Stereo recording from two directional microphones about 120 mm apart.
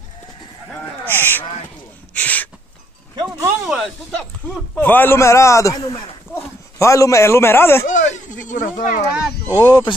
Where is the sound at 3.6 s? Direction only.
Centre (ahead or behind).